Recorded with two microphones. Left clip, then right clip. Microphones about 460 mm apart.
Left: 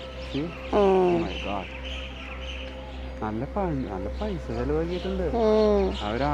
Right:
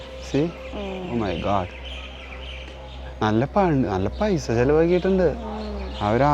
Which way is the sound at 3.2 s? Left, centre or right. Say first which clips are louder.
Right 9 dB; right.